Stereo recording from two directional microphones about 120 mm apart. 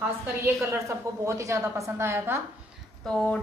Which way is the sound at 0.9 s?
25° right (ahead or behind).